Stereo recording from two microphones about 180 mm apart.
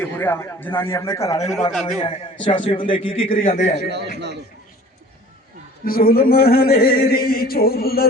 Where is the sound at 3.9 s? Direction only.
70° right (ahead or behind).